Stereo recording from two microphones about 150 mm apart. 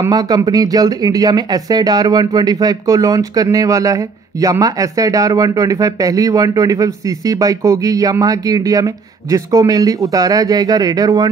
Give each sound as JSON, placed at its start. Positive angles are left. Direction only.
{"t": 0.0, "sound": "speech", "side_deg": -25}